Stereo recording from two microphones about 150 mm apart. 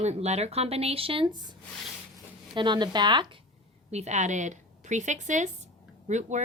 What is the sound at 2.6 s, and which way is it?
Speech, 30° right (ahead or behind).